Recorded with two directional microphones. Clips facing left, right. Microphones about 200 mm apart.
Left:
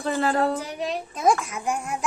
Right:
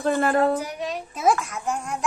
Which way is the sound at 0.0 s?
50° right (ahead or behind).